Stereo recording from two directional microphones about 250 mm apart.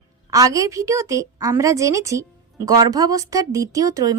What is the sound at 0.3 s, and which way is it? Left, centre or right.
A woman's voice, centre.